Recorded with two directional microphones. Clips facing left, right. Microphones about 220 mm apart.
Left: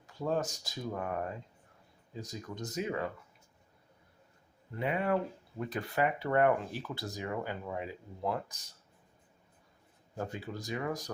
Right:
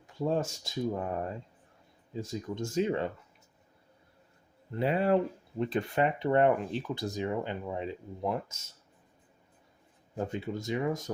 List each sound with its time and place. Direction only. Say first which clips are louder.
0.3 s speech: right 2 dB; 30° right (ahead or behind)
2.2 s speech: right 6 dB; 30° right (ahead or behind)
4.7 s speech: right 5 dB; 30° right (ahead or behind)
10.2 s speech: right 5 dB; 20° right (ahead or behind)